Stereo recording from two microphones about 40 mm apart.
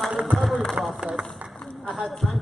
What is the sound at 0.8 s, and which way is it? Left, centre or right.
Run, right.